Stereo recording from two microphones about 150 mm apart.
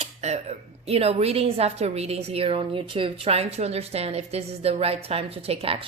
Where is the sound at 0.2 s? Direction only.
50° right (ahead or behind).